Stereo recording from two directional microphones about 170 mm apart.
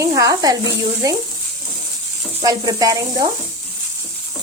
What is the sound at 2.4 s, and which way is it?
Speech, 20° right (ahead or behind).